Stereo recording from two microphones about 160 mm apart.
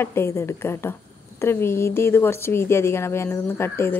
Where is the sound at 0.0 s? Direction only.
15° left (ahead or behind).